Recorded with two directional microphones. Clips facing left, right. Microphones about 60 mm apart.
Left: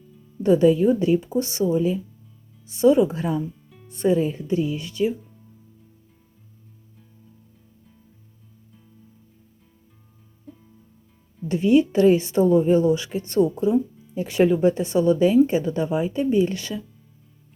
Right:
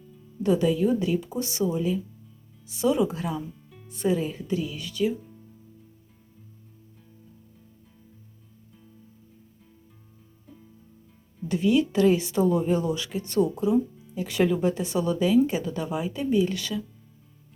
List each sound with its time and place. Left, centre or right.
0.4 s speech: left
10.5 s music: centre
11.4 s speech: left